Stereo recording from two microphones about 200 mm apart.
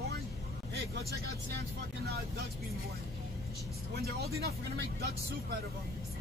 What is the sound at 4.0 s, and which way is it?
Speech, 50° right (ahead or behind).